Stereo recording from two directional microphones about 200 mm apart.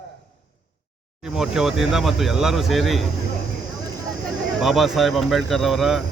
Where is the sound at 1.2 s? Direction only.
Centre (ahead or behind).